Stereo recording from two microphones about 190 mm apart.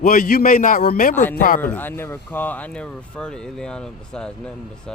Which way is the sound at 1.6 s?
10° left (ahead or behind).